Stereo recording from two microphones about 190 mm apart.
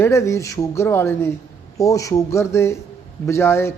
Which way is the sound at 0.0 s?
15° left (ahead or behind).